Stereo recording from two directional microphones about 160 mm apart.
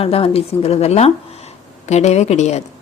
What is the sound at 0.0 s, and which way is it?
A woman's voice, 40° left (ahead or behind).